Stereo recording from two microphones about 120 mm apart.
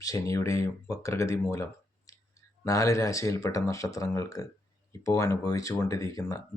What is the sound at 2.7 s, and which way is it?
Speech, 25° left (ahead or behind).